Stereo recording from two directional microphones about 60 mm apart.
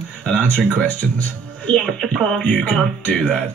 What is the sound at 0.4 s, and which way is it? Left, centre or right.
Speech, left.